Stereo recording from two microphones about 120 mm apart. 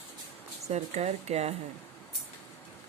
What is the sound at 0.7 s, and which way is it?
Speech, 65° right (ahead or behind).